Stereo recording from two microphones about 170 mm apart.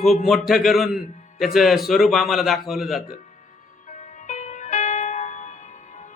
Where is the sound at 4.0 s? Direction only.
45° left (ahead or behind).